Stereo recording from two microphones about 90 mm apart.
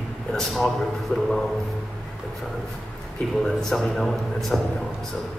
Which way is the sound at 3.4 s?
5° left (ahead or behind).